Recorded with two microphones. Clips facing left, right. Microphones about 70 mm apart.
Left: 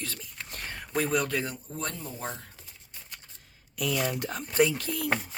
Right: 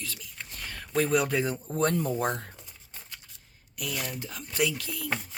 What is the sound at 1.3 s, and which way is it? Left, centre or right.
Speech, centre.